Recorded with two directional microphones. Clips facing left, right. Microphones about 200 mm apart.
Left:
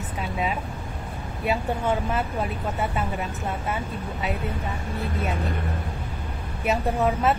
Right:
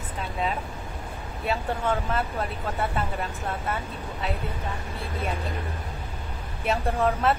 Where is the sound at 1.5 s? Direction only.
10° left (ahead or behind).